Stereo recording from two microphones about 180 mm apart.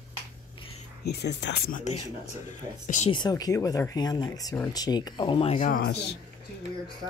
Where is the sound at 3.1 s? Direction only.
25° left (ahead or behind).